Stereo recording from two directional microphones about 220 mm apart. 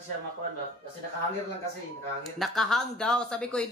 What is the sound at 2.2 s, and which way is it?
A woman's voice, centre (ahead or behind).